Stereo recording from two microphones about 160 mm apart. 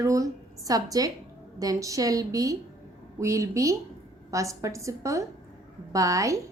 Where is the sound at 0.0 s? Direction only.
20° right (ahead or behind).